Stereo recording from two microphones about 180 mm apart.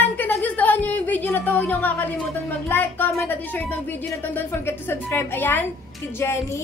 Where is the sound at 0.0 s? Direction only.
10° left (ahead or behind).